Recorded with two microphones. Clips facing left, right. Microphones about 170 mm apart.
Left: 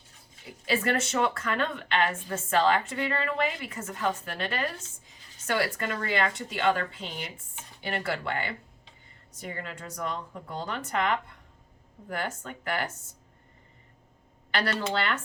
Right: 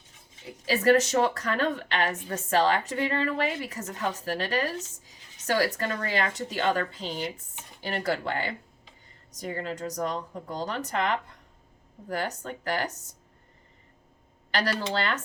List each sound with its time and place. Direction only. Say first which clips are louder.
0.7 s a woman's voice: right 6 dB; 40° right (ahead or behind)
14.5 s a woman's voice: right 1 dB; 40° right (ahead or behind)